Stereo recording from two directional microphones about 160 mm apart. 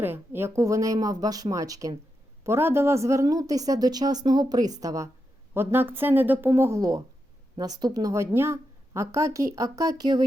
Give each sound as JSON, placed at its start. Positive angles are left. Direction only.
{"t": 0.0, "sound": "a woman's voice", "side_deg": -15}